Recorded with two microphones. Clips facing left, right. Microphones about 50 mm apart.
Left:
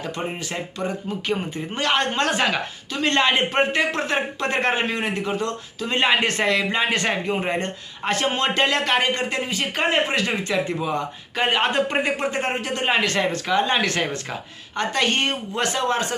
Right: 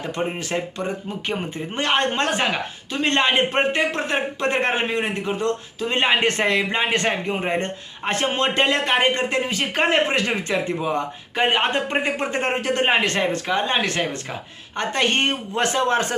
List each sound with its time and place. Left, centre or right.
0.3 s speech: right
3.8 s speech: centre
6.2 s speech: right
9.0 s speech: right
9.5 s speech: right
12.3 s speech: right
13.1 s speech: right
14.8 s speech: right